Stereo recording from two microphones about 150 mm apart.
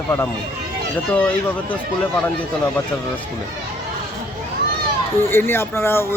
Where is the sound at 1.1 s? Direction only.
10° left (ahead or behind).